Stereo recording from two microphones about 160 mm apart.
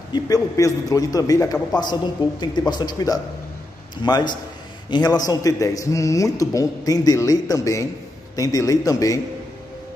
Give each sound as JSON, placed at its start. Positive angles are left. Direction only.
{"t": 0.1, "sound": "a man's voice", "side_deg": 20}